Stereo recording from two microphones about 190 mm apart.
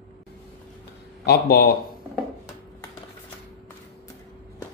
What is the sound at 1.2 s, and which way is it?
Speech, 55° left (ahead or behind).